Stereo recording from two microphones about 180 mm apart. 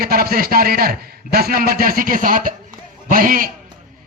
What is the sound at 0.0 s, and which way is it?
A man's voice, 55° right (ahead or behind).